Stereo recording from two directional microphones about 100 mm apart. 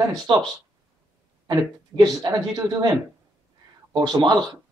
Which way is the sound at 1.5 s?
40° right (ahead or behind).